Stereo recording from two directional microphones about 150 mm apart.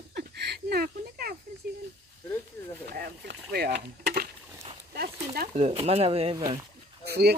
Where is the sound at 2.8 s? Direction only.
90° right.